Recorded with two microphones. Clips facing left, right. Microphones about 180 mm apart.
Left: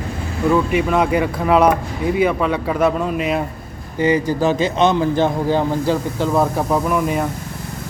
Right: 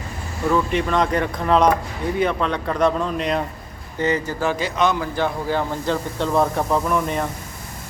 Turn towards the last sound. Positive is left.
turn(degrees=5)  # may be behind; listen again after turning